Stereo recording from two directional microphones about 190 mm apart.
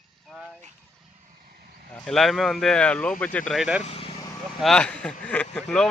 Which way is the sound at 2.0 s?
Centre (ahead or behind).